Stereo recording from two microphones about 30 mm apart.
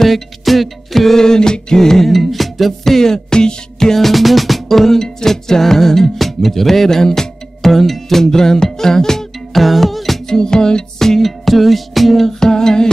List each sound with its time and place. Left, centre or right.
0.0 s music: centre
1.1 s music: left
3.9 s music: centre
7.6 s music: centre
8.2 s music: centre
9.6 s music: centre
10.2 s music: centre
12.4 s music: centre